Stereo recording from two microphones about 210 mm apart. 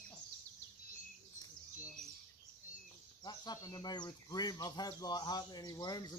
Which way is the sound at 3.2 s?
20° left (ahead or behind).